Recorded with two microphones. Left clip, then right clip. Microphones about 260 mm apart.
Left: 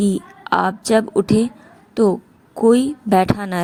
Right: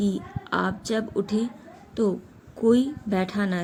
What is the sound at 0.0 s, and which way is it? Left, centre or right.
A woman's voice, left.